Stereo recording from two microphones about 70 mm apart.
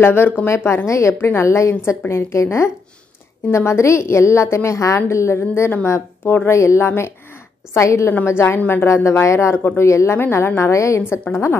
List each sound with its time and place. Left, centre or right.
0.0 s a woman's voice: left
1.1 s a woman's voice: left
8.8 s a woman's voice: left
11.0 s a woman's voice: left